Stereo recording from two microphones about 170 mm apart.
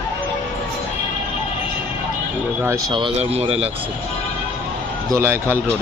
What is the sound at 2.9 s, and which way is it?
Speech, 35° right (ahead or behind).